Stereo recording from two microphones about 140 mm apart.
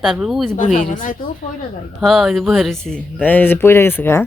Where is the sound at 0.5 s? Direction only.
65° left (ahead or behind).